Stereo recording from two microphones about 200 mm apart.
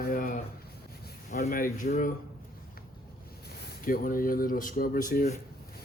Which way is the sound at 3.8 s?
45° left (ahead or behind).